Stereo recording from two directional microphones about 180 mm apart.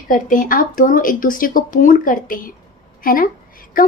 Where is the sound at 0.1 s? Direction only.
45° left (ahead or behind).